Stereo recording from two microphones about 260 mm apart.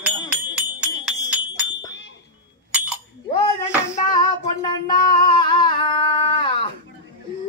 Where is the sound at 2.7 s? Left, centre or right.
Centre.